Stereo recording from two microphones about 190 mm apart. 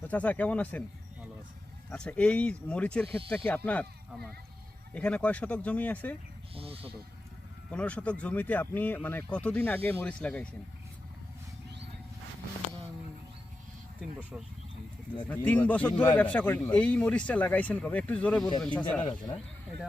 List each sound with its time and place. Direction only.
0.0 s speech: 10° left (ahead or behind)
1.9 s speech: 5° left (ahead or behind)
6.5 s speech: 30° right (ahead or behind)
7.7 s speech: 5° left (ahead or behind)
15.3 s speech: 10° left (ahead or behind)